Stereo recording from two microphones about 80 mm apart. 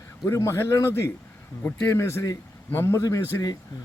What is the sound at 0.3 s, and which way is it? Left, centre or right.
Speech, left.